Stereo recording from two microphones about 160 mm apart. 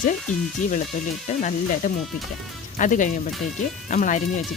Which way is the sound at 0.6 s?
50° left (ahead or behind).